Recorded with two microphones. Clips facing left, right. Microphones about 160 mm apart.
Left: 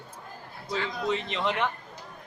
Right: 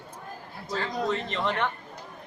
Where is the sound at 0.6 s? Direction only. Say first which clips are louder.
Right 2 dB; 40° right (ahead or behind).